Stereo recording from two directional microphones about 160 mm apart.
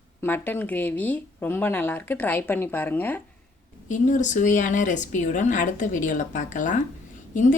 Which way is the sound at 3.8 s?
50° left (ahead or behind).